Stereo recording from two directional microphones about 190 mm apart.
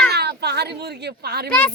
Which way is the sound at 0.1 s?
60° right (ahead or behind).